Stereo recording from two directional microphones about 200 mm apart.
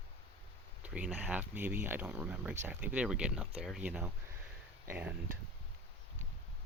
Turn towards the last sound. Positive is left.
turn(degrees=-5)  # may be behind; listen again after turning